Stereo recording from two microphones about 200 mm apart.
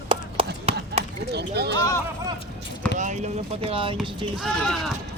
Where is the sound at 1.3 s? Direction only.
55° right (ahead or behind).